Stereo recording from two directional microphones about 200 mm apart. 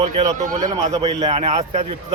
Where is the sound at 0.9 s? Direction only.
20° right (ahead or behind).